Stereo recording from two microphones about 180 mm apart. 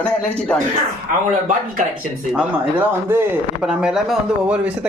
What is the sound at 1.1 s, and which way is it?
Speech, 50° right (ahead or behind).